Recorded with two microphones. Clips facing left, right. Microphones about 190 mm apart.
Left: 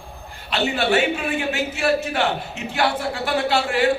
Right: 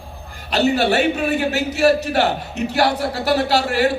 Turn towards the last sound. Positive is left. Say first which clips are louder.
# right 1 dB
turn(degrees=-40)  # may be behind; listen again after turning